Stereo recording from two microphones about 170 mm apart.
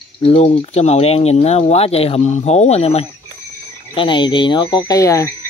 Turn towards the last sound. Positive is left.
turn(degrees=15)  # may be behind; listen again after turning